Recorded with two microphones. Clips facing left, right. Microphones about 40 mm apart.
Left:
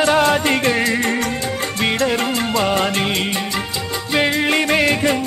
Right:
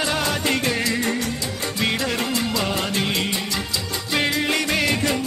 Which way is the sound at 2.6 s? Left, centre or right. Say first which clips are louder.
Left 6 dB; left.